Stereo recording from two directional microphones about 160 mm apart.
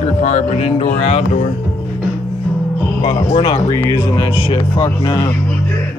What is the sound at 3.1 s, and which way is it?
Speech, 35° left (ahead or behind).